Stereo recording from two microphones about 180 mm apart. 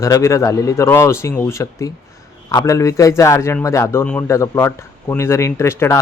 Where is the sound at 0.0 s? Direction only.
15° left (ahead or behind).